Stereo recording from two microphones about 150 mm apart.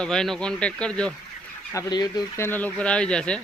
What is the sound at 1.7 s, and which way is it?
Speech, 25° left (ahead or behind).